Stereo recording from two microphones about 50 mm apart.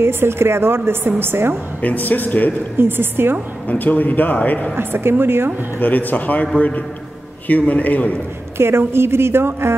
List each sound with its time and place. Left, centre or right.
0.0 s a woman's voice: right
1.8 s a man's voice: left
2.8 s a woman's voice: right
3.6 s a man's voice: left
4.7 s a woman's voice: right
5.8 s a man's voice: left
7.4 s a man's voice: left
8.5 s a woman's voice: right